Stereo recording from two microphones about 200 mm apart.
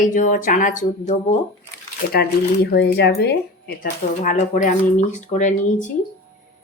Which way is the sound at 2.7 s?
55° left (ahead or behind).